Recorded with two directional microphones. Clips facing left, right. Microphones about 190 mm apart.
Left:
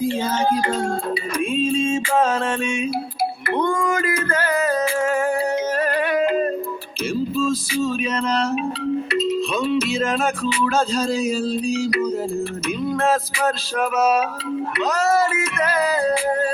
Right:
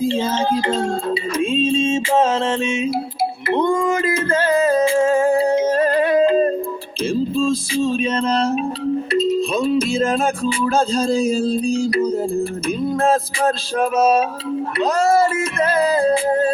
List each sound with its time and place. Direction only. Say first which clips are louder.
0.0 s music: right 2 dB; 25° right (ahead or behind)
3.5 s a sound: right 4 dB; 25° right (ahead or behind)
9.1 s music: right 6 dB; 30° right (ahead or behind)